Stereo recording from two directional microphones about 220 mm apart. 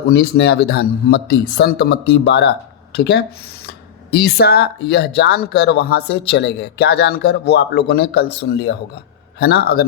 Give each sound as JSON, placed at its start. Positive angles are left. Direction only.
{"t": 0.1, "sound": "speech", "side_deg": 50}